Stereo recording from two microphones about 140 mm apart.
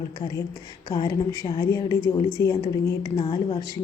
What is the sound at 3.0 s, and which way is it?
Speech, 30° left (ahead or behind).